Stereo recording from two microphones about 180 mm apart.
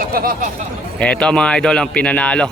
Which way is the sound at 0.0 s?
55° right (ahead or behind).